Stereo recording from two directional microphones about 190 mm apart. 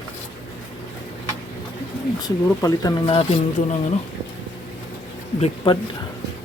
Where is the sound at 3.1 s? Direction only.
30° left (ahead or behind).